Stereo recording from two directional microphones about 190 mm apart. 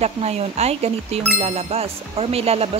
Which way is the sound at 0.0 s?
35° right (ahead or behind).